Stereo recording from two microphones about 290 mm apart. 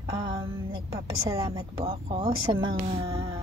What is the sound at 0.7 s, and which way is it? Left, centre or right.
A woman's voice, centre.